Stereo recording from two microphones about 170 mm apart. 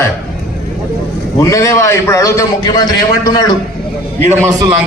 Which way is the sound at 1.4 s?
20° left (ahead or behind).